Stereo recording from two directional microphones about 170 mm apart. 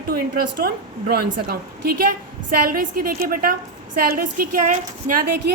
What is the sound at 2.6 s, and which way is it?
A woman's voice, 60° right (ahead or behind).